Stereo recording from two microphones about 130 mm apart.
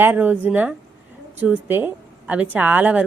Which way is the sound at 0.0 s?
15° right (ahead or behind).